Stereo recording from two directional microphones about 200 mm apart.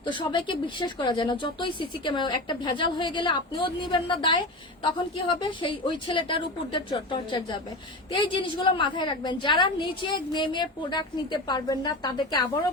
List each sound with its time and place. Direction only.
0.0 s speech: 25° left (ahead or behind)